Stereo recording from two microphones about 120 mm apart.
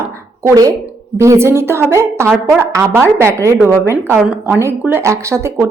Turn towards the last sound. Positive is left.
turn(degrees=-25)  # may be behind; listen again after turning